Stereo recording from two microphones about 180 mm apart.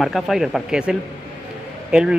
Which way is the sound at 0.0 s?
Centre (ahead or behind).